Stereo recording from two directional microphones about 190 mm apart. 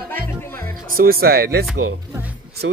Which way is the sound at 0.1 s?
10° left (ahead or behind).